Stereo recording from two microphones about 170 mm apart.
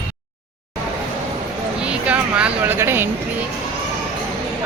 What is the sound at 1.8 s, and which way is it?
Vehicle, 5° right (ahead or behind).